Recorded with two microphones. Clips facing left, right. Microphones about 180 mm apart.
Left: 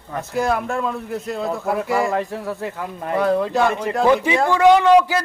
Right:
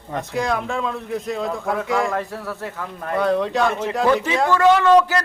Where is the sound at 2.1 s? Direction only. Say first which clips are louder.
Left 3 dB; 15° left (ahead or behind).